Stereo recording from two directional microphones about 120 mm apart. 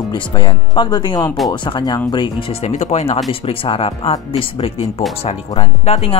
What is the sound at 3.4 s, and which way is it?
Speech, 50° left (ahead or behind).